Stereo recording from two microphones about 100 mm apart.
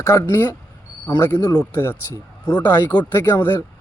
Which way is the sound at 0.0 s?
35° left (ahead or behind).